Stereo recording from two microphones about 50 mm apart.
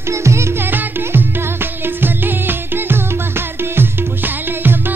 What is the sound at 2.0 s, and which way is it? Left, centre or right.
Music, right.